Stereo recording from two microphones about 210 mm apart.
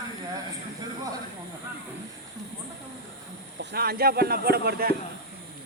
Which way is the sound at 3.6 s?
50° right (ahead or behind).